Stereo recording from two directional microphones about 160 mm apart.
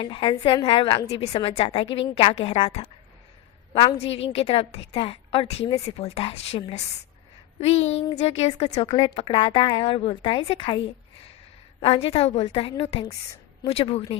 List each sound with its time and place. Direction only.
0.0 s a woman's voice: 30° left (ahead or behind)
8.9 s a woman's voice: 30° left (ahead or behind)
11.8 s a woman's voice: 35° left (ahead or behind)